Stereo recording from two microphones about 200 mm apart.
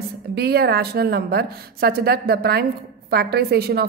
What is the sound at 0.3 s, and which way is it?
A woman's voice, 50° right (ahead or behind).